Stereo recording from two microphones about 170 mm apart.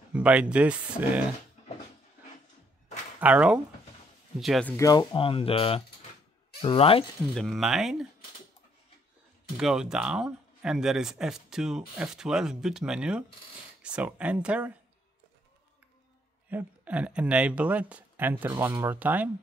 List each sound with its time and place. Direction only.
0.1 s speech: 10° right (ahead or behind)
3.2 s speech: 5° right (ahead or behind)
4.6 s speech: 20° left (ahead or behind)
5.1 s speech: 30° left (ahead or behind)
7.2 s speech: centre (ahead or behind)
9.6 s speech: 5° right (ahead or behind)
16.4 s speech: 10° right (ahead or behind)